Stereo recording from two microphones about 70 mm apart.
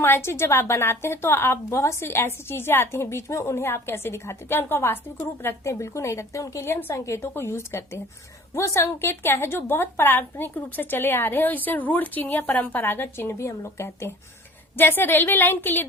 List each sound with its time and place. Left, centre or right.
0.0 s a woman's voice: left
5.6 s speech: left
6.9 s a woman's voice: left
14.8 s a woman's voice: left